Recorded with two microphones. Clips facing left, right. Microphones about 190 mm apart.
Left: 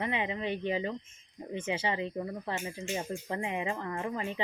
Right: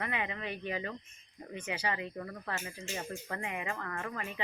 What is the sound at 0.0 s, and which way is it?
Speech, 25° left (ahead or behind).